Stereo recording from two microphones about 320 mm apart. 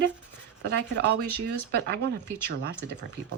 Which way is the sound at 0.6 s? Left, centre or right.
Right.